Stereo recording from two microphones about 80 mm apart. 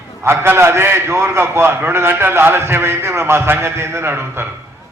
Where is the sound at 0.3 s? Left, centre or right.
Right.